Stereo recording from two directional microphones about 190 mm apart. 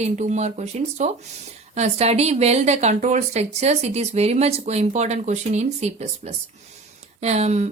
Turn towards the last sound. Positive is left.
turn(degrees=-35)  # may be behind; listen again after turning